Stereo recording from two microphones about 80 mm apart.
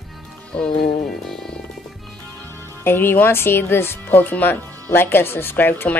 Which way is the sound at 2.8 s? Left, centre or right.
Left.